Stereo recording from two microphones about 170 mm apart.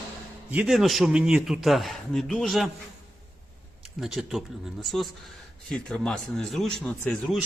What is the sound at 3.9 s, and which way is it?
A man's voice, centre (ahead or behind).